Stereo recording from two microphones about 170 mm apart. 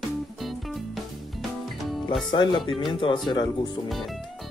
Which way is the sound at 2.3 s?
25° left (ahead or behind).